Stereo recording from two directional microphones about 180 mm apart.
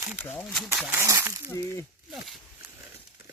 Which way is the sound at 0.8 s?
10° right (ahead or behind).